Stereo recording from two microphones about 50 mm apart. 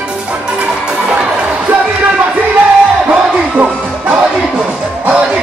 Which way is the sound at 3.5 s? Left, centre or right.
Right.